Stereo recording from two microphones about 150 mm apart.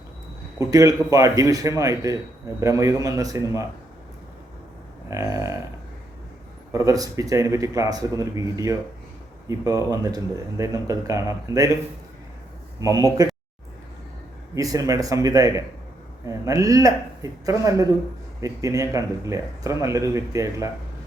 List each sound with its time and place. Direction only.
0.6 s speech: 20° right (ahead or behind)
5.0 s speech: 20° right (ahead or behind)
6.7 s speech: 25° right (ahead or behind)
12.8 s speech: 20° right (ahead or behind)
14.5 s speech: 25° right (ahead or behind)